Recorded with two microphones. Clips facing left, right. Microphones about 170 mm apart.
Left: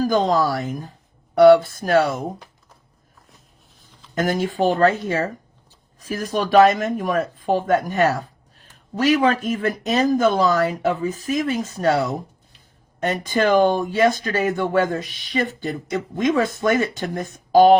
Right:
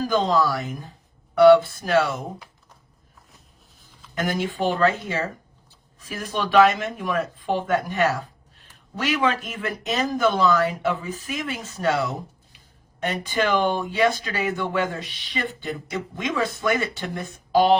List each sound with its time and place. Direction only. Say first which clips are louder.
0.0 s speech: left 3 dB; 40° left (ahead or behind)
4.1 s speech: left 4 dB; 40° left (ahead or behind)